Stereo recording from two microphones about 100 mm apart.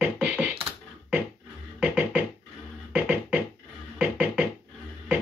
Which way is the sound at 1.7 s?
15° right (ahead or behind).